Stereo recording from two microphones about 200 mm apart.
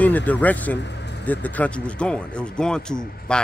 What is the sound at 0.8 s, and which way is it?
Vehicle, 60° left (ahead or behind).